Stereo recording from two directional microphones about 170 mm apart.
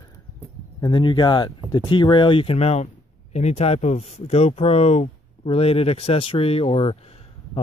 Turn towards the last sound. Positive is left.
turn(degrees=35)  # may be behind; listen again after turning